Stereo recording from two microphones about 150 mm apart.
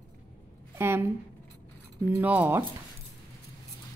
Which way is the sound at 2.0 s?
10° right (ahead or behind).